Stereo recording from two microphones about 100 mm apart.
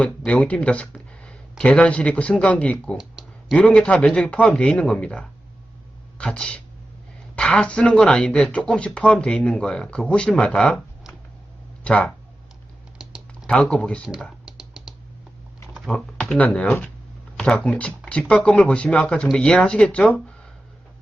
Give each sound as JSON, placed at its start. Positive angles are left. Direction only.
{"t": 0.3, "sound": "speech", "side_deg": 10}
{"t": 3.0, "sound": "a sound", "side_deg": -5}
{"t": 3.6, "sound": "speech", "side_deg": 10}
{"t": 11.8, "sound": "speech", "side_deg": 10}
{"t": 13.0, "sound": "typing", "side_deg": -5}
{"t": 13.5, "sound": "speech", "side_deg": 10}
{"t": 14.4, "sound": "computer keyboard", "side_deg": -10}
{"t": 15.9, "sound": "speech", "side_deg": 5}